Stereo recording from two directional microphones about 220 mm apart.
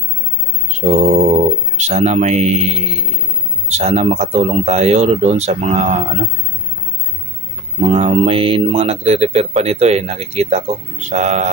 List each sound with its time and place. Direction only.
0.7 s speech: 30° right (ahead or behind)
7.8 s speech: 30° right (ahead or behind)